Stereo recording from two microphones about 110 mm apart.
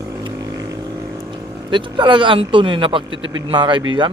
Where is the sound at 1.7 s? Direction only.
45° right (ahead or behind).